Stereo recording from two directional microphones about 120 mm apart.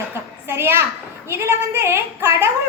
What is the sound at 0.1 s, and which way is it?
A child's voice, 20° right (ahead or behind).